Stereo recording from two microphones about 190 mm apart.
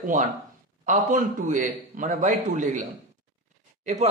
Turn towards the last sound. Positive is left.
turn(degrees=-35)  # may be behind; listen again after turning